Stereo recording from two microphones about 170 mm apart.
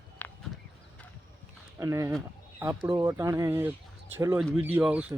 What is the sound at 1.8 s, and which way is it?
Speech, 20° right (ahead or behind).